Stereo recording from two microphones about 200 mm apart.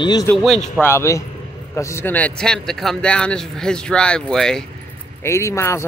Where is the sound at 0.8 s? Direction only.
15° left (ahead or behind).